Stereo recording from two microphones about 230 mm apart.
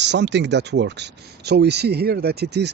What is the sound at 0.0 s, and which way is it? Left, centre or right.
Speech, right.